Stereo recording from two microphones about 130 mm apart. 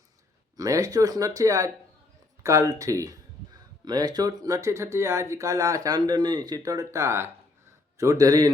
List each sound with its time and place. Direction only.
0.5 s speech: 25° right (ahead or behind)